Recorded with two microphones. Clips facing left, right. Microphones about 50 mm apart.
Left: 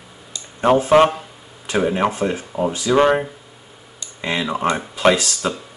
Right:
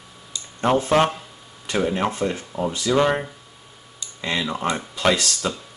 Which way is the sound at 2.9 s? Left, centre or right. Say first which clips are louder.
Left 5 dB; centre.